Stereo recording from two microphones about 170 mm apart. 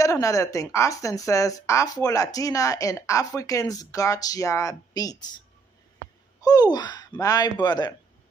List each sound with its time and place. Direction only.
0.0 s a woman's voice: 20° left (ahead or behind)
6.4 s a woman's voice: 25° left (ahead or behind)